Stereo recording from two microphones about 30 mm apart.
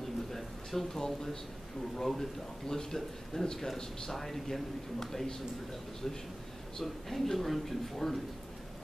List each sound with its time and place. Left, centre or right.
0.3 s a man's voice: centre
6.8 s speech: centre